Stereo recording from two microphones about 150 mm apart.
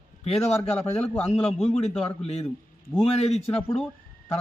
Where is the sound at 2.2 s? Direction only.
45° left (ahead or behind).